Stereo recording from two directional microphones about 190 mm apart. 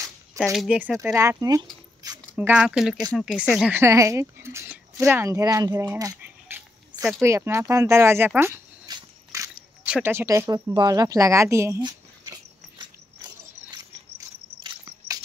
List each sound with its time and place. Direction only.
0.4 s speech: centre (ahead or behind); by 1.7 s 20° right (ahead or behind)
2.3 s speech: 5° right (ahead or behind)
8.4 s dog: 15° right (ahead or behind)
9.8 s a sound: 10° right (ahead or behind)
14.6 s insect: 25° right (ahead or behind)